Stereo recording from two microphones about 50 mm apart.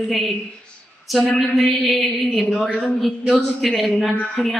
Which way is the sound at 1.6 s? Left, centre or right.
Centre.